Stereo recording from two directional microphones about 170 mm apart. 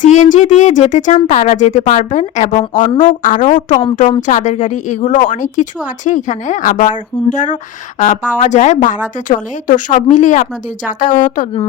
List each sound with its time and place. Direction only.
0.0 s speech: 45° left (ahead or behind)